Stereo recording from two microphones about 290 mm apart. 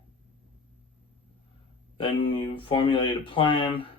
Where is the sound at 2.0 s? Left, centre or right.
Centre.